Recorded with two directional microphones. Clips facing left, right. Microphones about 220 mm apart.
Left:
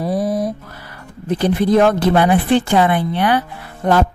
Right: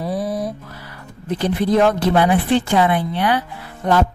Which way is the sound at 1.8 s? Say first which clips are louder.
Left 1 dB; 50° left (ahead or behind).